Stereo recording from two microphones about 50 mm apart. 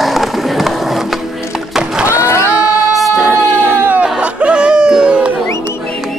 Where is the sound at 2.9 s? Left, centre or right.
Centre.